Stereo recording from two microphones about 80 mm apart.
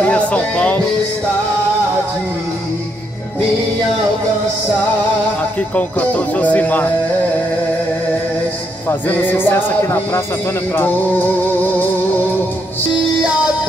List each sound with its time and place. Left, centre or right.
0.1 s music: centre
5.8 s a man's voice: centre
8.8 s a man's voice: left